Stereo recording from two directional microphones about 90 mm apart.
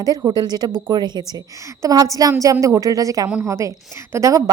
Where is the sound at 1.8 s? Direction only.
40° right (ahead or behind).